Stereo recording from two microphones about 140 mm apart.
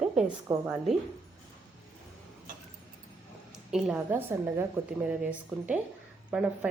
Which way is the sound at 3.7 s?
10° right (ahead or behind).